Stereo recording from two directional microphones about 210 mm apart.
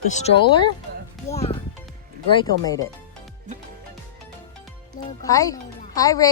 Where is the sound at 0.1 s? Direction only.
30° left (ahead or behind).